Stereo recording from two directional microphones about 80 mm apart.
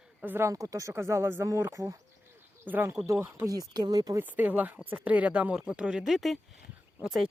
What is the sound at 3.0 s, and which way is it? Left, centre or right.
Speech, right.